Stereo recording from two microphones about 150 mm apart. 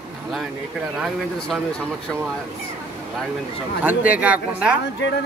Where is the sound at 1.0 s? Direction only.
Centre (ahead or behind).